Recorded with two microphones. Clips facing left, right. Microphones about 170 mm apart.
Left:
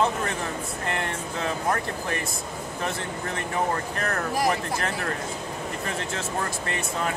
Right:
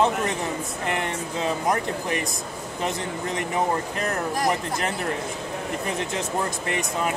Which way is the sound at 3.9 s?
20° right (ahead or behind).